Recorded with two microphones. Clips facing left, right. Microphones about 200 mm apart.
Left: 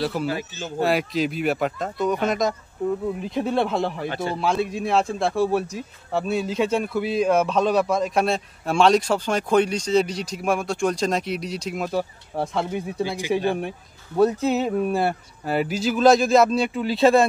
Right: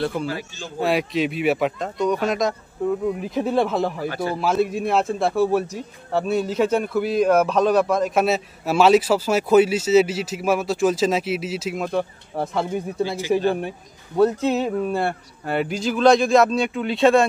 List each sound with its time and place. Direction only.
0.0 s speech: 5° left (ahead or behind)
4.1 s a man's voice: 25° left (ahead or behind)
4.4 s speech: centre (ahead or behind)
14.1 s speech: 5° left (ahead or behind)